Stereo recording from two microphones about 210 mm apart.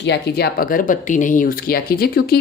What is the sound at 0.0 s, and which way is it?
Speech, 50° left (ahead or behind).